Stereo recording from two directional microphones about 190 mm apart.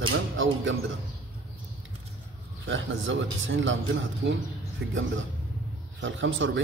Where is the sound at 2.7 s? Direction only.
75° right (ahead or behind).